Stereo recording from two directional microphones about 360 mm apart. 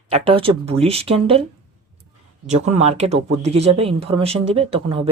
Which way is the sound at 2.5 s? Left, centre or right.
Centre.